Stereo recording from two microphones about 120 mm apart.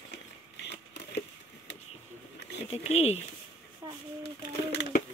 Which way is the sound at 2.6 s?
60° left (ahead or behind).